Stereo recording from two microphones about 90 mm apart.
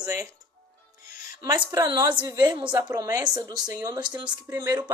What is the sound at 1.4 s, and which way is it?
A woman's voice, 55° right (ahead or behind).